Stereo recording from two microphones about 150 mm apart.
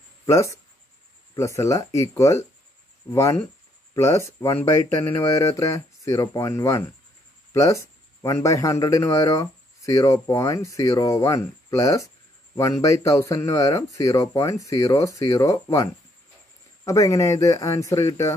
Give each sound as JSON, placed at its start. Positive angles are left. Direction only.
{"t": 0.3, "sound": "speech", "side_deg": 20}